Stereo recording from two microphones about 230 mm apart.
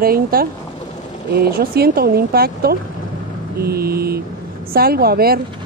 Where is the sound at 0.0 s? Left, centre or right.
Right.